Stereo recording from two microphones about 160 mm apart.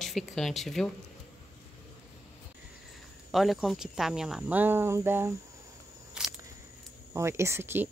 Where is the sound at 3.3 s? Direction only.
Centre (ahead or behind).